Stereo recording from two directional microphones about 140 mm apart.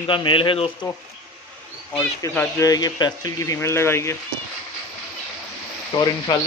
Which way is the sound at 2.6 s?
25° left (ahead or behind).